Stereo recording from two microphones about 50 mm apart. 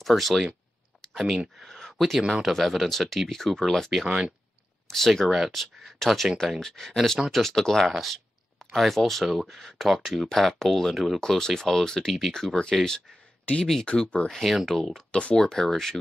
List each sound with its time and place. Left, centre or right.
0.0 s speech: centre
5.3 s speech: centre
13.8 s speech: centre
14.4 s speech: centre
15.0 s speech: left